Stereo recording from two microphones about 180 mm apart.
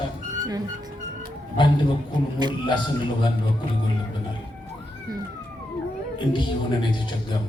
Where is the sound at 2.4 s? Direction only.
25° right (ahead or behind).